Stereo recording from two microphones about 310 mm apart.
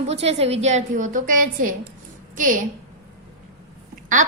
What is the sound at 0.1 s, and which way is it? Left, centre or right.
A woman's voice, centre.